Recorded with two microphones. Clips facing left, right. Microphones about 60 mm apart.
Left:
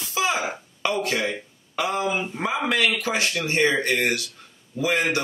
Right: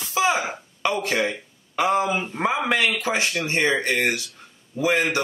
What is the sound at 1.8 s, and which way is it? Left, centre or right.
A man's voice, right.